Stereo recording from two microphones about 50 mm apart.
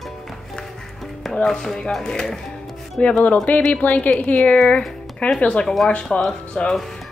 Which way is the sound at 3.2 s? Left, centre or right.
Left.